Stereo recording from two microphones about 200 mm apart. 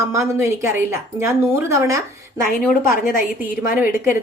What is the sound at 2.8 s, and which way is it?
Speech, 45° left (ahead or behind).